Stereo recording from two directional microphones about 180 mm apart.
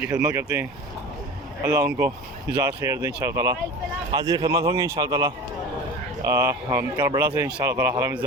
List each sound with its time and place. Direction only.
0.1 s a man's voice: 15° right (ahead or behind)
7.0 s speech: 25° right (ahead or behind)